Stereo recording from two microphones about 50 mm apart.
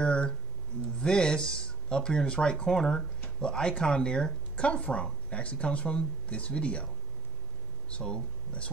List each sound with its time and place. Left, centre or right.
0.0 s a sound: left
1.0 s speech: centre
7.9 s speech: centre